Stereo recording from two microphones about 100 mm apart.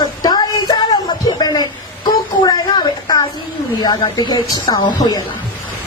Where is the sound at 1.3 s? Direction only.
40° left (ahead or behind).